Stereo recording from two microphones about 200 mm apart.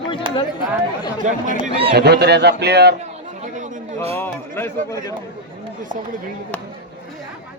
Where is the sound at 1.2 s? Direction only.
35° right (ahead or behind).